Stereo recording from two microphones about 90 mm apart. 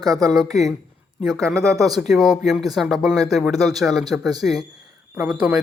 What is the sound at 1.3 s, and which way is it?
Speech, 35° right (ahead or behind).